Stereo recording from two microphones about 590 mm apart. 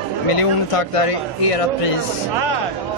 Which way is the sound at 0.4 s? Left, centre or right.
Left.